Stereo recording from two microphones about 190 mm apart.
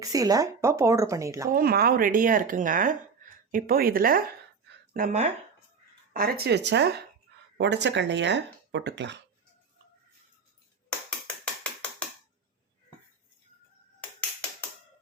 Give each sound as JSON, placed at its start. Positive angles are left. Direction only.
{"t": 0.0, "sound": "speech", "side_deg": -20}
{"t": 1.5, "sound": "speech", "side_deg": -50}
{"t": 4.9, "sound": "speech", "side_deg": -40}
{"t": 6.1, "sound": "speech", "side_deg": -50}
{"t": 7.3, "sound": "a sound", "side_deg": -65}
{"t": 7.6, "sound": "speech", "side_deg": -65}
{"t": 11.6, "sound": "a sound", "side_deg": 5}